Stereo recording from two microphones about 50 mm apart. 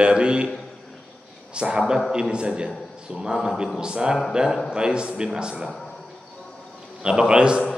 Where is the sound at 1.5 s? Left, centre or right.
Centre.